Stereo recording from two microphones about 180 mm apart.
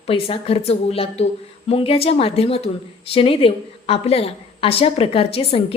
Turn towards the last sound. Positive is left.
turn(degrees=30)  # may be behind; listen again after turning